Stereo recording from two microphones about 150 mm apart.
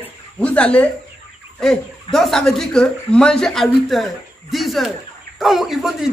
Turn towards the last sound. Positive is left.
turn(degrees=0)  # may be behind; listen again after turning